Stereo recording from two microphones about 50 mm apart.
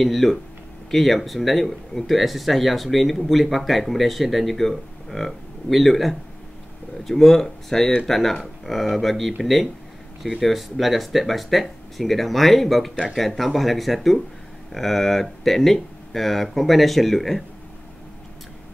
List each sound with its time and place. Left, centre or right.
0.0 s speech: centre